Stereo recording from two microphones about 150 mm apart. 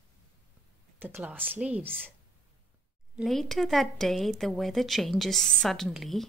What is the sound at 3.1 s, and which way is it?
A woman's voice, centre (ahead or behind).